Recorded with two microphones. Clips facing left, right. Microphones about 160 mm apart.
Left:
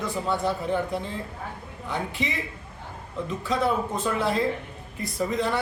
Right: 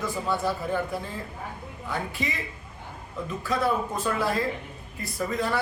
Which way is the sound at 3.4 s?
20° left (ahead or behind).